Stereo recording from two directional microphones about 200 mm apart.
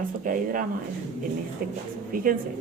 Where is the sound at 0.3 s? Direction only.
45° right (ahead or behind).